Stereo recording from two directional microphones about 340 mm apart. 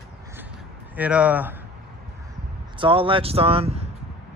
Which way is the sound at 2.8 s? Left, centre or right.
Centre.